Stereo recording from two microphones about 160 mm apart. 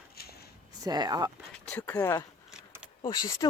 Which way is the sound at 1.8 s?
10° left (ahead or behind).